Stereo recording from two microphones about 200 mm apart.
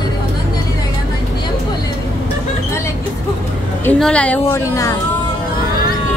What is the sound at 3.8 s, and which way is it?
A woman's voice, 5° left (ahead or behind).